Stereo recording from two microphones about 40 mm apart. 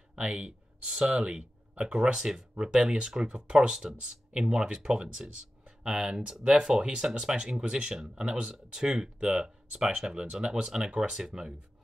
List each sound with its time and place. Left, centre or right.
0.3 s speech: centre
6.8 s speech: right